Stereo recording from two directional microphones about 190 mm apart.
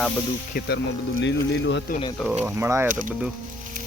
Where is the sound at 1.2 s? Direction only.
75° left (ahead or behind).